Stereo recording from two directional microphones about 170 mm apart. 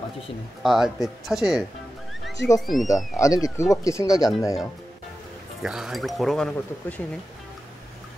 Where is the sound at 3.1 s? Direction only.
20° left (ahead or behind).